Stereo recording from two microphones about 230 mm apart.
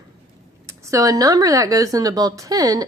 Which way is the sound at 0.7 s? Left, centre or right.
Centre.